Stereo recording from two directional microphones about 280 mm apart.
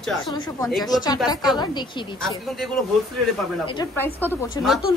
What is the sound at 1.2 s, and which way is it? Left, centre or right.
Speech, centre.